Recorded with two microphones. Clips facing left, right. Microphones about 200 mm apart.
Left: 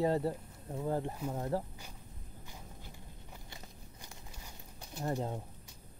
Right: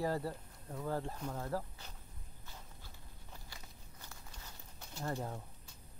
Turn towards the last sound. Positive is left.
turn(degrees=20)  # may be behind; listen again after turning